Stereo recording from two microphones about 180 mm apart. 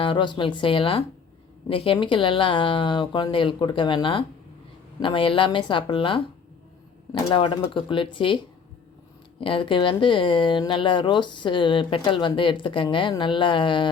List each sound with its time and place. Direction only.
0.0 s speech: 25° left (ahead or behind)
9.4 s speech: 30° left (ahead or behind)